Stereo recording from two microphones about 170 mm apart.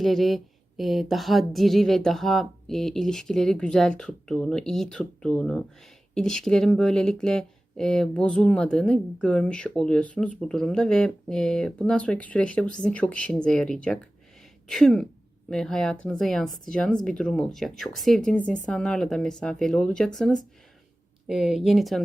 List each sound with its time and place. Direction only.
0.0 s speech: centre (ahead or behind)